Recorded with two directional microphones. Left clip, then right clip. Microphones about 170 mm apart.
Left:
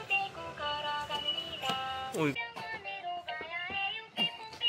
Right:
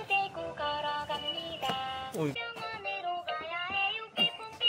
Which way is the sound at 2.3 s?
90° right.